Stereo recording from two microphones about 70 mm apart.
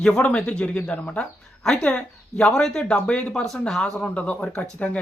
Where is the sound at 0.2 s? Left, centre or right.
Centre.